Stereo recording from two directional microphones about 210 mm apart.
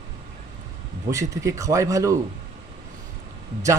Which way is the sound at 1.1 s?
15° right (ahead or behind).